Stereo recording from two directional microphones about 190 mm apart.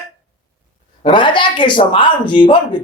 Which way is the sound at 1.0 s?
25° left (ahead or behind).